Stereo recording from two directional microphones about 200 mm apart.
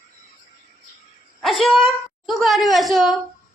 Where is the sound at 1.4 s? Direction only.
Centre (ahead or behind).